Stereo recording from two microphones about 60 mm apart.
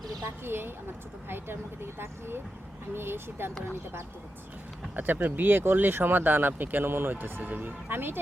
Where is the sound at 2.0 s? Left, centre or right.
Right.